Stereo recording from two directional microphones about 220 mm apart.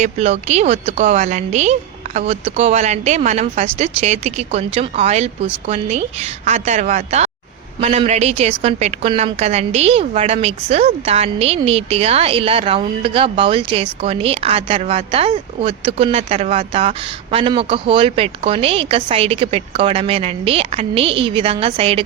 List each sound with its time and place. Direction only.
0.0 s a woman's voice: 30° right (ahead or behind)